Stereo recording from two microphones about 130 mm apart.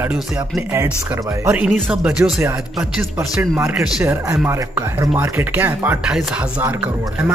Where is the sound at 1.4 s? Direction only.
10° right (ahead or behind).